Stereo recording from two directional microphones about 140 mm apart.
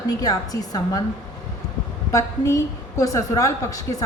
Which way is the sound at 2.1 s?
25° left (ahead or behind).